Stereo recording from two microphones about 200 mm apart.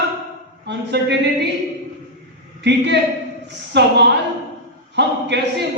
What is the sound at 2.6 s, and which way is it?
A man's voice, 60° right (ahead or behind).